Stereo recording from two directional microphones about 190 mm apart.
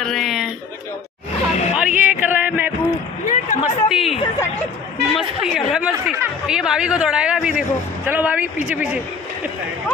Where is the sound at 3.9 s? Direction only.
Centre (ahead or behind).